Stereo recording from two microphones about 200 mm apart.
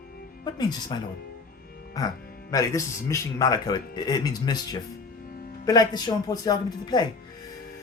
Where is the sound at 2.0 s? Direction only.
20° left (ahead or behind).